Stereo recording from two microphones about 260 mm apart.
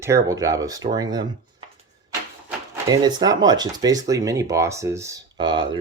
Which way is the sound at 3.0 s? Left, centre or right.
Centre.